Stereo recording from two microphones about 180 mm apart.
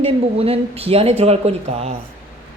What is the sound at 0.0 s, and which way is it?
A woman's voice, 30° right (ahead or behind).